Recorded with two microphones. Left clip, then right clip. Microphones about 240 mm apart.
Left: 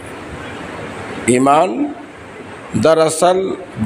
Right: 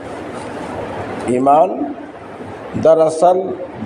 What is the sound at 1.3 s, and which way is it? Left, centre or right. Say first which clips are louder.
Speech: even; left.